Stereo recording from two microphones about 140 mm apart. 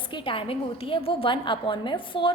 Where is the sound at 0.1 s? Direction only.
40° left (ahead or behind).